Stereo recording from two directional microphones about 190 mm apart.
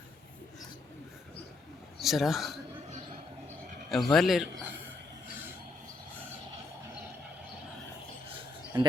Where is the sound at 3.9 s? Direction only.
Centre (ahead or behind).